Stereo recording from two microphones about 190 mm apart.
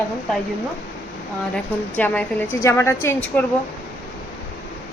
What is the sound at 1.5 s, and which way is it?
A woman's voice, 10° left (ahead or behind).